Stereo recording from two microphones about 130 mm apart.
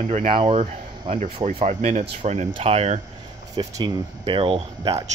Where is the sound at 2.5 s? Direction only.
45° right (ahead or behind).